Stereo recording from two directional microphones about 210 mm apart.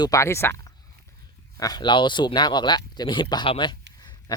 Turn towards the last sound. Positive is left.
turn(degrees=20)  # may be behind; listen again after turning